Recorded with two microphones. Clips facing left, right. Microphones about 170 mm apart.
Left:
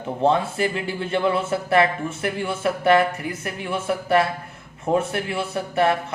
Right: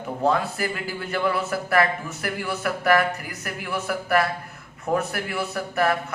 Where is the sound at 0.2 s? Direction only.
25° left (ahead or behind).